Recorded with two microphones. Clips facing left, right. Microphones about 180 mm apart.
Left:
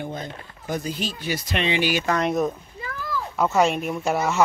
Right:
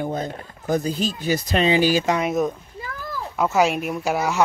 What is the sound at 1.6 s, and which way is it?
Speech, 35° right (ahead or behind).